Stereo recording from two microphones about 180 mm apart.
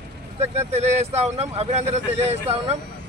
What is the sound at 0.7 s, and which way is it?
Speech, 35° right (ahead or behind).